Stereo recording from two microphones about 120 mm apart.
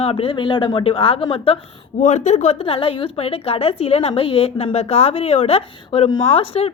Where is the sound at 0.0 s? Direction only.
50° left (ahead or behind).